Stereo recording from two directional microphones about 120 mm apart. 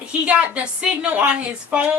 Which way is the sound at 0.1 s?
10° right (ahead or behind).